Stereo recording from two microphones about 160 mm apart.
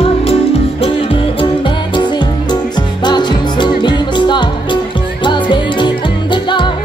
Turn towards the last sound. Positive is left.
turn(degrees=30)  # may be behind; listen again after turning